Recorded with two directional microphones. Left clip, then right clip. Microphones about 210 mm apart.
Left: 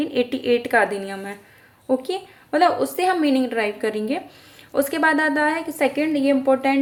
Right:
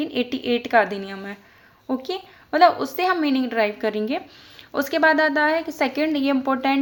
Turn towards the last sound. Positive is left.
turn(degrees=-30)  # may be behind; listen again after turning